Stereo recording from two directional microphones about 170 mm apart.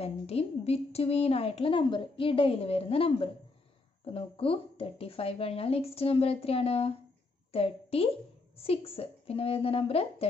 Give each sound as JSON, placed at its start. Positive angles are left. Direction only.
{"t": 0.0, "sound": "a woman's voice", "side_deg": 35}